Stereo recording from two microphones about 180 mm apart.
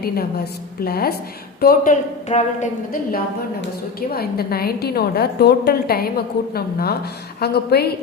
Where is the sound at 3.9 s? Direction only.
60° left (ahead or behind).